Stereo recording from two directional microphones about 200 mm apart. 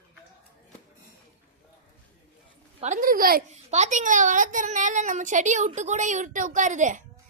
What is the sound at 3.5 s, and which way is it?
A woman's voice, 35° right (ahead or behind).